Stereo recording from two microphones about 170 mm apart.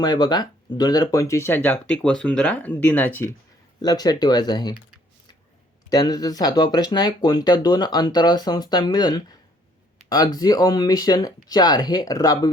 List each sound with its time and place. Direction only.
0.0 s speech: 25° left (ahead or behind); by 3.1 s 10° left (ahead or behind)
3.8 s speech: 25° left (ahead or behind)
5.9 s speech: 20° left (ahead or behind)